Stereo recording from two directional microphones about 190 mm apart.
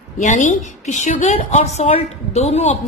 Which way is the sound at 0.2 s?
40° left (ahead or behind).